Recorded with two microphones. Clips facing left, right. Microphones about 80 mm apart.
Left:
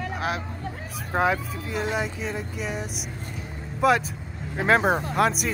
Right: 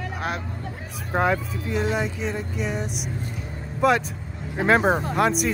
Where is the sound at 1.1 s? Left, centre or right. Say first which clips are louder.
Right 1 dB; centre.